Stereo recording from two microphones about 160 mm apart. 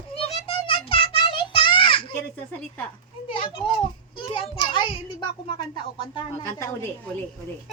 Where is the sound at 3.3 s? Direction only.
35° left (ahead or behind).